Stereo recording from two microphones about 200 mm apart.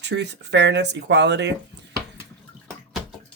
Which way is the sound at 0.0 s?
60° right (ahead or behind).